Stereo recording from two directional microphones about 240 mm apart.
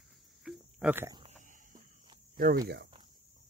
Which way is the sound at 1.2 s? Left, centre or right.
Right.